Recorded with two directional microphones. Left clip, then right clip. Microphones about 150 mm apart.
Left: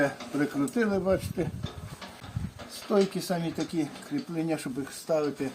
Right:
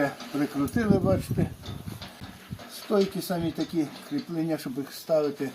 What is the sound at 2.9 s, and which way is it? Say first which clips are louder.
Speech: even; 20° left (ahead or behind).